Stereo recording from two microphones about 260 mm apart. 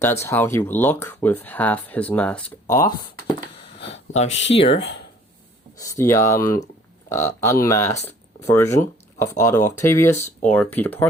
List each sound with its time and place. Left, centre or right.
0.0 s speech: centre
4.3 s speech: left
5.8 s speech: centre